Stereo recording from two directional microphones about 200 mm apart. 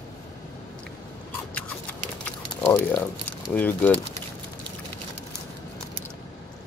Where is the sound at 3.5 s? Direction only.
10° left (ahead or behind).